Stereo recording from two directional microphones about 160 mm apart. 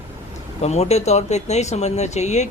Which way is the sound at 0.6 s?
40° left (ahead or behind).